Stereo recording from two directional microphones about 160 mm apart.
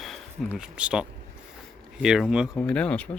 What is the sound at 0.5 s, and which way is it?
Speech, 5° right (ahead or behind).